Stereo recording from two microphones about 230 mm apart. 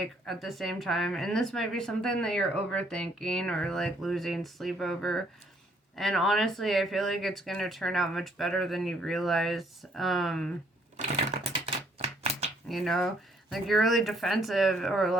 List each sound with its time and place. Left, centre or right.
0.0 s speech: centre
10.9 s typewriter: right
12.6 s speech: centre